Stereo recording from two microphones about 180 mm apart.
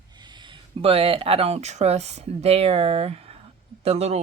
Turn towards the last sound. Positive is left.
turn(degrees=-35)  # may be behind; listen again after turning